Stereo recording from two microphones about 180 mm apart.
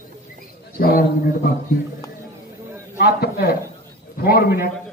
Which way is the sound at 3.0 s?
60° left (ahead or behind).